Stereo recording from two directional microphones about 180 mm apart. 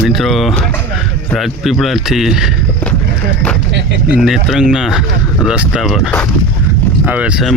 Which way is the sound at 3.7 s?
70° right (ahead or behind).